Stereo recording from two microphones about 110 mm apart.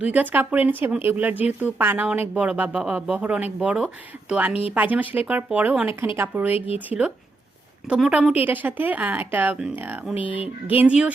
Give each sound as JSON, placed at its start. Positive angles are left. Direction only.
{"t": 0.0, "sound": "a woman's voice", "side_deg": -15}
{"t": 8.4, "sound": "speech", "side_deg": -15}